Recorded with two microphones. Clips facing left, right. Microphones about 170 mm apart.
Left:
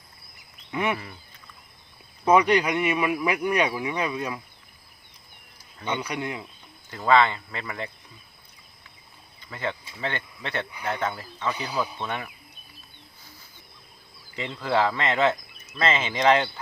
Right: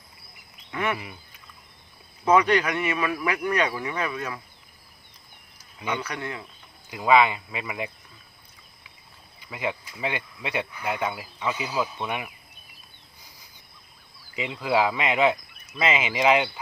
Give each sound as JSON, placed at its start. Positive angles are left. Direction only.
{"t": 0.7, "sound": "speech", "side_deg": 15}
{"t": 2.2, "sound": "speech", "side_deg": 15}
{"t": 6.0, "sound": "speech", "side_deg": 15}
{"t": 6.9, "sound": "speech", "side_deg": -10}
{"t": 9.4, "sound": "speech", "side_deg": -10}
{"t": 14.3, "sound": "speech", "side_deg": -10}